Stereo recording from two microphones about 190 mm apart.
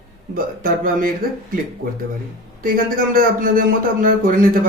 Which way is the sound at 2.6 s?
50° right (ahead or behind).